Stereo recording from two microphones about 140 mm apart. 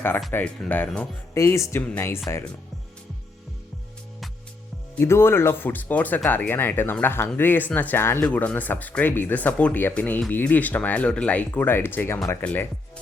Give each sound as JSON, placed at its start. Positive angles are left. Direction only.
{"t": 0.3, "sound": "speech", "side_deg": 15}
{"t": 4.9, "sound": "speech", "side_deg": 15}